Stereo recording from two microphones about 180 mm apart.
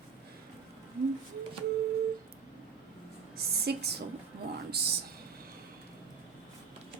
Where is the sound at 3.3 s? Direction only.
65° right (ahead or behind).